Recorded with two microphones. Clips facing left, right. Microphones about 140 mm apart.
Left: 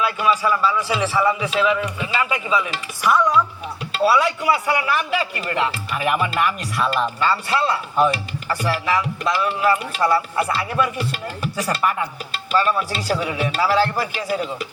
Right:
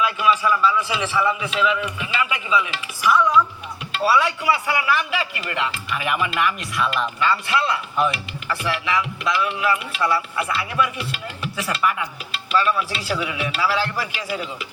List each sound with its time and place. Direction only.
0.0 s a man's voice: 35° left (ahead or behind)